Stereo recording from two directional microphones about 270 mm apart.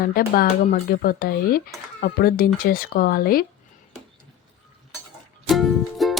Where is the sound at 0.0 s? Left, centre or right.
Left.